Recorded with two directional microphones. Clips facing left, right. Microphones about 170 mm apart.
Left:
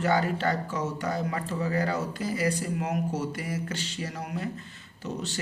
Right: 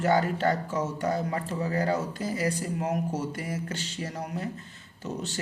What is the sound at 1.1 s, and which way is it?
Speech, 25° right (ahead or behind).